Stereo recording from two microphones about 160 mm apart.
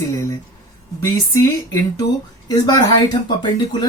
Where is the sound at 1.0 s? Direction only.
20° left (ahead or behind).